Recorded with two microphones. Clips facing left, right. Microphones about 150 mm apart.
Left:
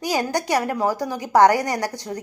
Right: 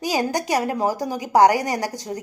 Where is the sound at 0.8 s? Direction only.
45° right (ahead or behind).